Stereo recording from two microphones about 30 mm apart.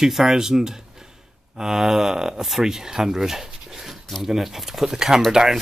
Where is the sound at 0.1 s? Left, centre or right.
Centre.